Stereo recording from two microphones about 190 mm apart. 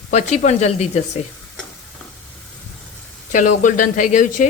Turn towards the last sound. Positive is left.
turn(degrees=40)  # may be behind; listen again after turning